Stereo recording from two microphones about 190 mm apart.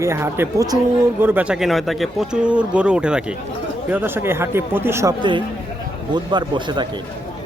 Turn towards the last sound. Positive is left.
turn(degrees=-25)  # may be behind; listen again after turning